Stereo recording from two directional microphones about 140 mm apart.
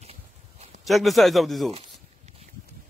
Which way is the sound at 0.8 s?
Centre (ahead or behind).